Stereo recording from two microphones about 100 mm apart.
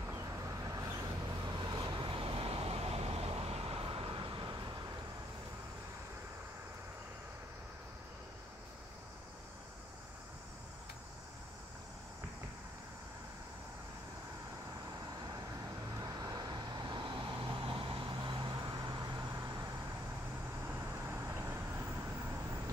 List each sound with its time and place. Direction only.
0.0 s vehicle: 30° right (ahead or behind)
1.4 s vehicle: 50° right (ahead or behind)
16.0 s vehicle: 40° right (ahead or behind)
20.6 s vehicle: 25° right (ahead or behind)